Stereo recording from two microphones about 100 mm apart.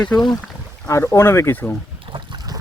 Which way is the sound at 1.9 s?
60° right (ahead or behind).